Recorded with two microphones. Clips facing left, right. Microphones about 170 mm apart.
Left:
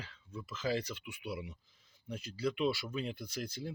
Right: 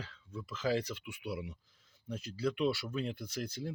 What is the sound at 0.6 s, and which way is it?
Speech, centre (ahead or behind).